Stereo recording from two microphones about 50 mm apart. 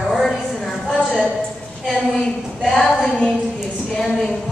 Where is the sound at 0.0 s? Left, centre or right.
Centre.